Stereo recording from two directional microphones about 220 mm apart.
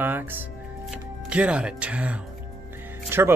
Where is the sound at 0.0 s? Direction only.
10° right (ahead or behind).